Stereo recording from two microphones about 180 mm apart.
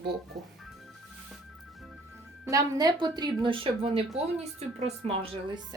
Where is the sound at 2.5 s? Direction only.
20° right (ahead or behind).